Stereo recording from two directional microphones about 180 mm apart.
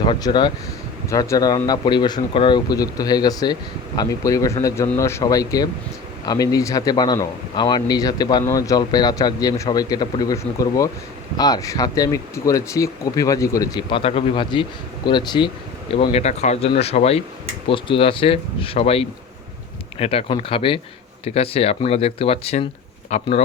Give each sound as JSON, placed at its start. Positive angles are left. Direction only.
{"t": 0.0, "sound": "a man's voice", "side_deg": 25}
{"t": 16.0, "sound": "speech", "side_deg": 35}